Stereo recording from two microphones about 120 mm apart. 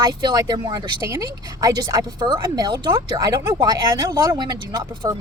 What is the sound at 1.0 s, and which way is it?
A woman's voice, 25° right (ahead or behind).